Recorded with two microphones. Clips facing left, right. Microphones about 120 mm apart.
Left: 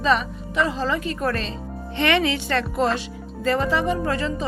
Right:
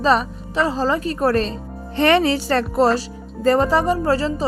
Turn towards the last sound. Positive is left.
turn(degrees=-35)  # may be behind; listen again after turning